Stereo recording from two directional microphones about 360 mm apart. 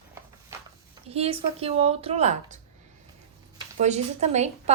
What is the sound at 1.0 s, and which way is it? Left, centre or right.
A woman's voice, centre.